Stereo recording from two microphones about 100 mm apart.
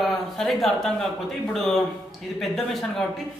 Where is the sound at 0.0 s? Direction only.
Centre (ahead or behind).